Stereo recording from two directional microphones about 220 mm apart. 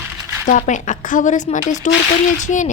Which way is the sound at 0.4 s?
35° left (ahead or behind).